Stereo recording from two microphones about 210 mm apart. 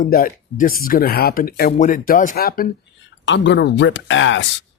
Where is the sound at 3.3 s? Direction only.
60° left (ahead or behind).